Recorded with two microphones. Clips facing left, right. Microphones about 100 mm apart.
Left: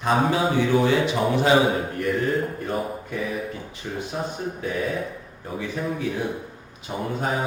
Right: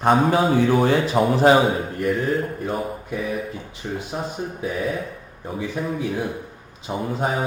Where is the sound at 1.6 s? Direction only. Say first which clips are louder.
Right 2 dB; centre (ahead or behind).